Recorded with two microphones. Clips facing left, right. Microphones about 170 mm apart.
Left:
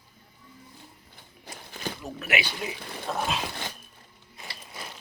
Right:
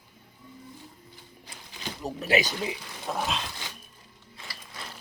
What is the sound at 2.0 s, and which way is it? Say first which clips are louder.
Speech: right 6 dB; 35° right (ahead or behind).